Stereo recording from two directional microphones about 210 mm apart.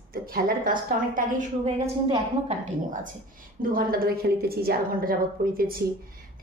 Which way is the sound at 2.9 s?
40° right (ahead or behind).